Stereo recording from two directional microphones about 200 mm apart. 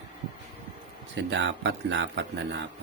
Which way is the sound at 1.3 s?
65° right (ahead or behind).